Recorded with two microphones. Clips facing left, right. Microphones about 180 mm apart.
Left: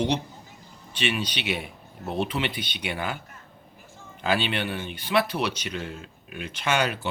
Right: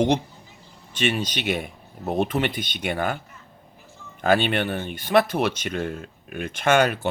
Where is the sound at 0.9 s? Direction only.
45° right (ahead or behind).